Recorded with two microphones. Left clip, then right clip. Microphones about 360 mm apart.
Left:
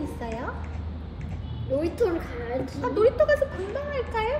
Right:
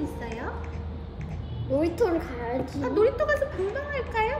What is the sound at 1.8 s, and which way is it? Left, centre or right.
A woman's voice, centre.